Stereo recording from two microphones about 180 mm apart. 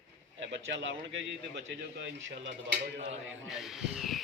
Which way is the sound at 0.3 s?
90° right.